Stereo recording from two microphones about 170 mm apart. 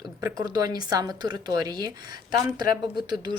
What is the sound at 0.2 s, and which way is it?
A woman's voice, 20° right (ahead or behind).